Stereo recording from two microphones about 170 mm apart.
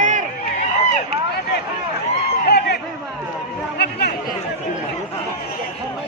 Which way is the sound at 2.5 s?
70° left (ahead or behind).